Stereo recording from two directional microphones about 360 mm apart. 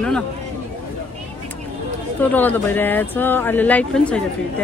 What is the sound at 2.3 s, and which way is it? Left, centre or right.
Speech, centre.